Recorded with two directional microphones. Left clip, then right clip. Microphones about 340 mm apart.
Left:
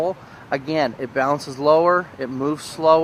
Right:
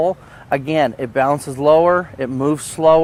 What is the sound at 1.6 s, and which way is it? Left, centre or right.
Speech, right.